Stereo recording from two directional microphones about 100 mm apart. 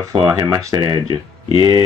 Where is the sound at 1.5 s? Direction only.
45° right (ahead or behind).